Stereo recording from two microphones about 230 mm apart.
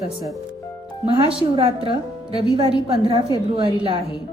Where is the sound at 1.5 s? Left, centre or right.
Right.